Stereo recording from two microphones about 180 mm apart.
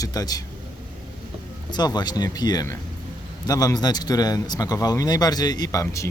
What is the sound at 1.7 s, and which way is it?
A man's voice, 20° left (ahead or behind).